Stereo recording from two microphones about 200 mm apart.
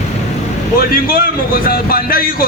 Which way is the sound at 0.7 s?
45° left (ahead or behind).